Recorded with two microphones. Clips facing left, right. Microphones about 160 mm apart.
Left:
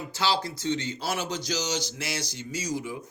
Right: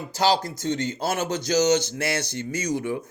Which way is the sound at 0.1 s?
45° right (ahead or behind).